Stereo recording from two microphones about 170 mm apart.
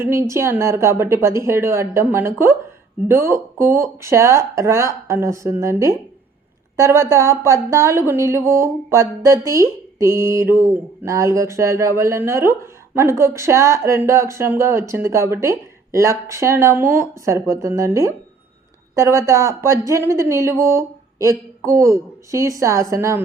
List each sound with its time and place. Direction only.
0.0 s speech: 15° right (ahead or behind)